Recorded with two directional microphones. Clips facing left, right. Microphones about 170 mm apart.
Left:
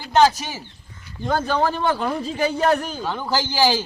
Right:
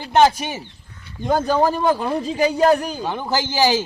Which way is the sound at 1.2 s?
15° right (ahead or behind).